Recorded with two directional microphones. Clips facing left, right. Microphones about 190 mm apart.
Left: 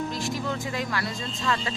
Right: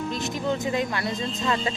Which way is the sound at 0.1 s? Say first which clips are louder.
Right 3 dB; 20° right (ahead or behind).